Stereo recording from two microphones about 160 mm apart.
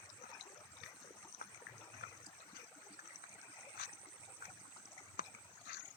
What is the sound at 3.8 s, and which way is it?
Stream, 75° left (ahead or behind).